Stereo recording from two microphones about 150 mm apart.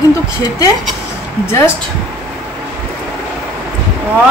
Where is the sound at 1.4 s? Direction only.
15° left (ahead or behind).